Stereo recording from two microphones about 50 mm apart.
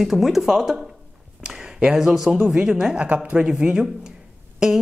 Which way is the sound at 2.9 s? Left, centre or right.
Right.